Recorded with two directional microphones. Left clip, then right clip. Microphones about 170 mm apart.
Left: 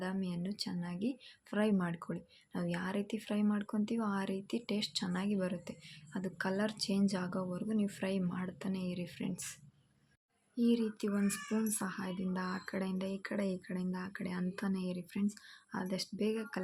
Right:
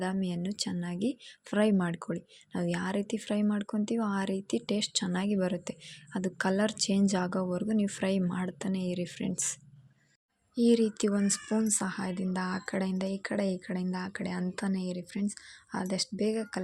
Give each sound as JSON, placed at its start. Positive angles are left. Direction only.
{"t": 0.0, "sound": "speech", "side_deg": -40}